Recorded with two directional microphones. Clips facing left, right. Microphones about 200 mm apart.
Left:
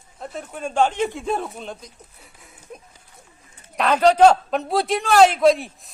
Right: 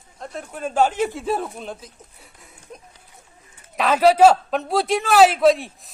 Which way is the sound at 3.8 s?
5° right (ahead or behind).